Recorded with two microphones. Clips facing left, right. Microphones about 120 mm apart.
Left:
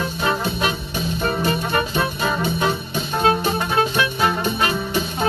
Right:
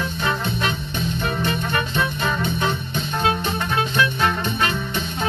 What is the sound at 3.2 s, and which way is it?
Music, 35° left (ahead or behind).